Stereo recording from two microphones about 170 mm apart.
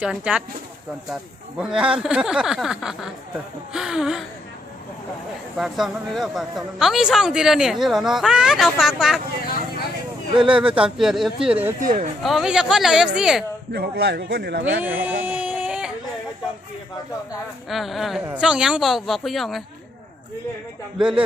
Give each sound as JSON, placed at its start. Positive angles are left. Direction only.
{"t": 0.0, "sound": "speech", "side_deg": -5}
{"t": 1.5, "sound": "a man's voice", "side_deg": -5}
{"t": 5.5, "sound": "a man's voice", "side_deg": 0}
{"t": 10.4, "sound": "a man's voice", "side_deg": -5}
{"t": 11.8, "sound": "speech", "side_deg": -50}
{"t": 12.2, "sound": "a man's voice", "side_deg": 0}
{"t": 13.7, "sound": "speech", "side_deg": -70}
{"t": 14.8, "sound": "a sound", "side_deg": -10}
{"t": 17.7, "sound": "a man's voice", "side_deg": 0}
{"t": 21.0, "sound": "a man's voice", "side_deg": -5}